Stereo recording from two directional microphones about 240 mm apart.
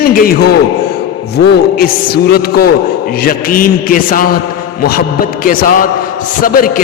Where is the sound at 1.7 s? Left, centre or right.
Left.